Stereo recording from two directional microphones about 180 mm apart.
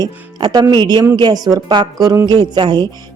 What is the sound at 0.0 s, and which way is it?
A woman's voice, 25° right (ahead or behind).